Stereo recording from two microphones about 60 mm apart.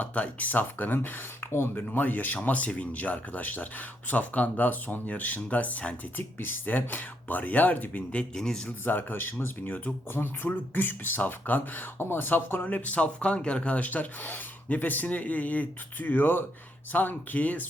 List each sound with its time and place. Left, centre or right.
0.0 s speech: left
6.1 s speech: left
8.4 s speech: centre
8.8 s speech: left